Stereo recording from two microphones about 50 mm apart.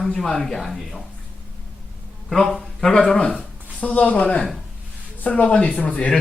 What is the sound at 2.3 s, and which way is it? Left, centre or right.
Speech, centre.